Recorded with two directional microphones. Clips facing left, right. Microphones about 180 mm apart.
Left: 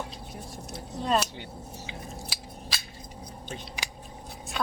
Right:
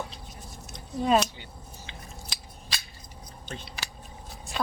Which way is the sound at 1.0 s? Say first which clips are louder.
Right 3 dB; 5° right (ahead or behind).